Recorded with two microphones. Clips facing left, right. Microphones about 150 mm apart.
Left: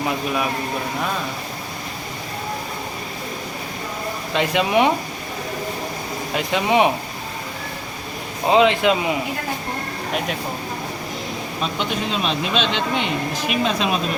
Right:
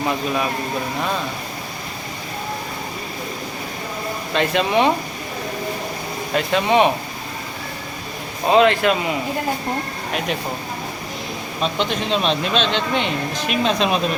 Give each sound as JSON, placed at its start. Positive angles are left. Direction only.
{"t": 4.4, "sound": "speech", "side_deg": 10}
{"t": 6.3, "sound": "speech", "side_deg": 15}
{"t": 8.4, "sound": "speech", "side_deg": 15}
{"t": 11.6, "sound": "speech", "side_deg": 5}